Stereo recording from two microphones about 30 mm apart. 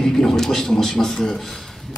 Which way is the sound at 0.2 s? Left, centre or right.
Centre.